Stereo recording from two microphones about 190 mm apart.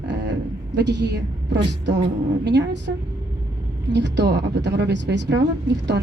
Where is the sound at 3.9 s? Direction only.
65° right (ahead or behind).